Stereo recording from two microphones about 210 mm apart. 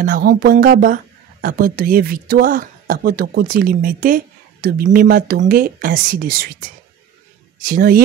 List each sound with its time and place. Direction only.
0.0 s speech: 45° right (ahead or behind)
7.6 s speech: 45° right (ahead or behind)